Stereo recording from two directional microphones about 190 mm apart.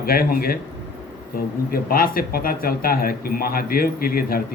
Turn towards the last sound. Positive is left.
turn(degrees=50)  # may be behind; listen again after turning